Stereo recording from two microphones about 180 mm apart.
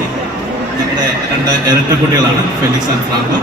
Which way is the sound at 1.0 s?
20° right (ahead or behind).